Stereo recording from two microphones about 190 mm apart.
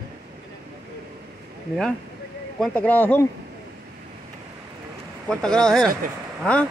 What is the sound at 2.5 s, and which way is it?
Speech, 5° left (ahead or behind).